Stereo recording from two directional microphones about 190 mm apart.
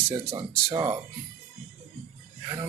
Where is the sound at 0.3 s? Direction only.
20° right (ahead or behind).